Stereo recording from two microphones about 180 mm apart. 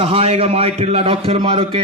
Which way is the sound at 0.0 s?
30° right (ahead or behind).